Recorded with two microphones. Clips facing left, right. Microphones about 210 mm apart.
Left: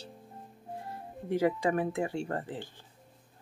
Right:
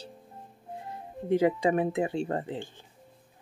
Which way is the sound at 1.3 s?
20° right (ahead or behind).